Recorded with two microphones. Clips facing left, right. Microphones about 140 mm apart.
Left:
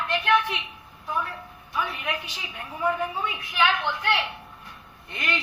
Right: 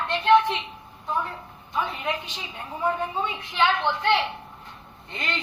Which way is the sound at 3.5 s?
25° right (ahead or behind).